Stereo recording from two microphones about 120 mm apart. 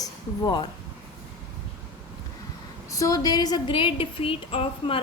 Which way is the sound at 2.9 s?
30° left (ahead or behind).